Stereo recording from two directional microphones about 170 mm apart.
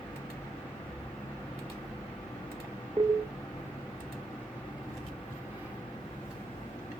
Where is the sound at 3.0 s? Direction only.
35° right (ahead or behind).